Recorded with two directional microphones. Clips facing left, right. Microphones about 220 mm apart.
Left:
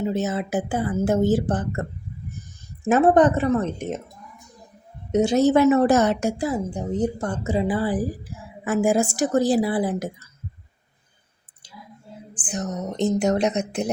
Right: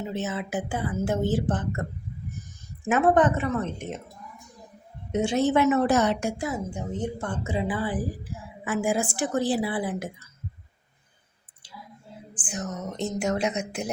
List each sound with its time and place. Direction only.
0.0 s a woman's voice: 40° left (ahead or behind)
2.8 s a woman's voice: 35° left (ahead or behind)
5.1 s a woman's voice: 40° left (ahead or behind)
12.3 s a woman's voice: 35° left (ahead or behind)